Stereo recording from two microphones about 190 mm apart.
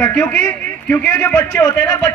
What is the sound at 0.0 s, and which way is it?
A man's voice, 5° left (ahead or behind).